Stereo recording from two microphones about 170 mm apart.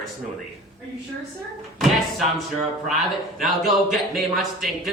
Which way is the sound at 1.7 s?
Centre (ahead or behind).